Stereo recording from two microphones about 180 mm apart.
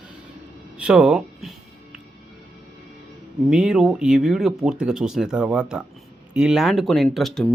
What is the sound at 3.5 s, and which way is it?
Speech, 5° right (ahead or behind).